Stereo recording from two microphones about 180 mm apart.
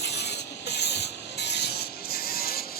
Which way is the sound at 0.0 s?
70° left (ahead or behind).